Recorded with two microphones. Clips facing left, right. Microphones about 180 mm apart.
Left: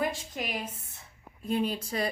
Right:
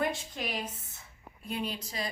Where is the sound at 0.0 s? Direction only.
5° left (ahead or behind).